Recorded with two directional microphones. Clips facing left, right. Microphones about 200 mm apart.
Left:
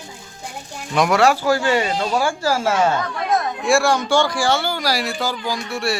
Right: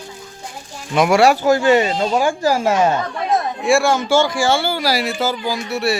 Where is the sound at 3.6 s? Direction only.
Centre (ahead or behind).